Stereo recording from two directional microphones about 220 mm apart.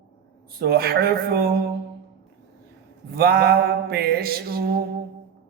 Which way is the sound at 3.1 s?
45° right (ahead or behind).